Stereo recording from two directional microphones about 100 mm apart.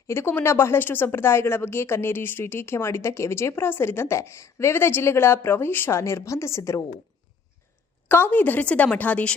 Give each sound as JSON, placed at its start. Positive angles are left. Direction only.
{"t": 0.1, "sound": "speech", "side_deg": 25}
{"t": 8.0, "sound": "a woman's voice", "side_deg": 20}